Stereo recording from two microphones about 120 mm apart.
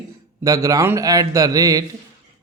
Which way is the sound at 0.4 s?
25° right (ahead or behind).